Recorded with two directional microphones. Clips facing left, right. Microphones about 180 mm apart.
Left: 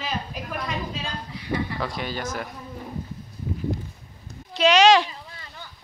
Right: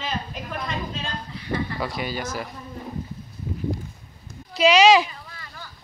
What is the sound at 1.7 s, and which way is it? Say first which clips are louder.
Speech: right 1 dB; 10° right (ahead or behind).